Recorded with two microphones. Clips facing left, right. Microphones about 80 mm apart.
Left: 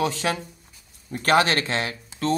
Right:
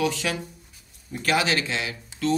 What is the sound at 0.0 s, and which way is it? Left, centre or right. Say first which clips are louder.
Speech: left 1 dB; left.